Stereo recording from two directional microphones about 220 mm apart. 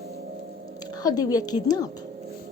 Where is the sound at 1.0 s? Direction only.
15° left (ahead or behind).